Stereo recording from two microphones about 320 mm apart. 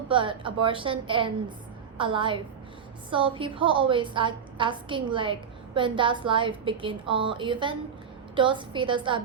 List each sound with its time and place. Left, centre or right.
0.1 s a woman's voice: centre